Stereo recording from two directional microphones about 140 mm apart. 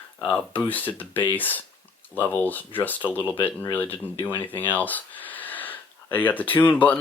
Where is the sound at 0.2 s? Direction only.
10° left (ahead or behind).